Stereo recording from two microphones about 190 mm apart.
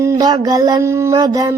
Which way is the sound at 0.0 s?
20° right (ahead or behind).